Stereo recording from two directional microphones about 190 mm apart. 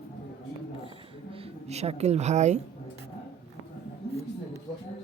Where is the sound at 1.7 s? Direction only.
35° right (ahead or behind).